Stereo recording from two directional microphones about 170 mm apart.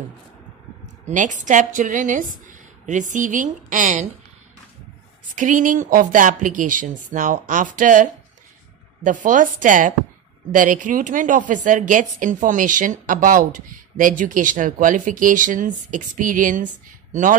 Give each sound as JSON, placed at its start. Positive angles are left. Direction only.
{"t": 1.0, "sound": "a woman's voice", "side_deg": -45}
{"t": 5.3, "sound": "a woman's voice", "side_deg": -50}